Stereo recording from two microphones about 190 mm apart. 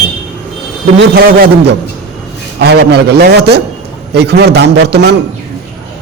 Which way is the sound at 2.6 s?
60° right (ahead or behind).